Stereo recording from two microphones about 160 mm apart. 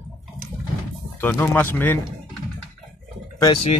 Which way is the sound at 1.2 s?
10° left (ahead or behind).